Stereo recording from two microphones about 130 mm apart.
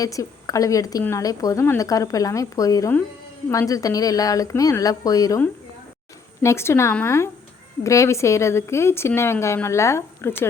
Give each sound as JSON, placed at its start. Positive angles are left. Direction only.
{"t": 0.0, "sound": "speech", "side_deg": 25}
{"t": 6.4, "sound": "speech", "side_deg": 20}